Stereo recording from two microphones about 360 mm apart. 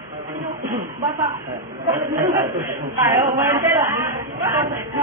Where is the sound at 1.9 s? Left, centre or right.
Centre.